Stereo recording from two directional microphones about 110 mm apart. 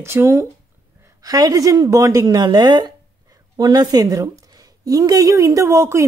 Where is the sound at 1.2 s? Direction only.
35° right (ahead or behind).